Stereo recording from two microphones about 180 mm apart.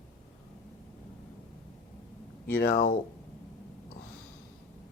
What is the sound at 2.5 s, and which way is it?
Speech, 50° left (ahead or behind).